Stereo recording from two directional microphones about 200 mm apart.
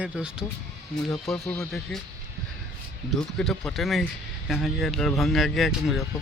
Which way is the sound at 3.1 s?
5° left (ahead or behind).